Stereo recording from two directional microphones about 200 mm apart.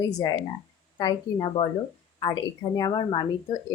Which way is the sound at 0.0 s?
20° left (ahead or behind).